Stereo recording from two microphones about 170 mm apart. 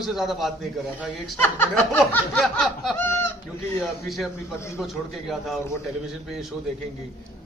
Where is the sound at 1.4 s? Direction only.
10° left (ahead or behind).